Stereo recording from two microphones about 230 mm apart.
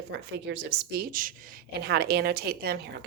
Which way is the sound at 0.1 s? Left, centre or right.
Right.